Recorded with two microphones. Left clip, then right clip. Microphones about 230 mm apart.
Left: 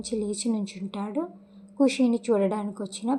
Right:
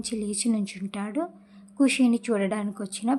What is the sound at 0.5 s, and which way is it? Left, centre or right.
A woman's voice, right.